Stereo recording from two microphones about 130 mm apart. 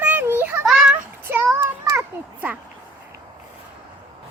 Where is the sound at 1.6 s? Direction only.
25° right (ahead or behind).